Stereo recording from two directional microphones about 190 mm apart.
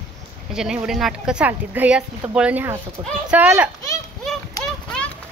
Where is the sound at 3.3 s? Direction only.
10° right (ahead or behind).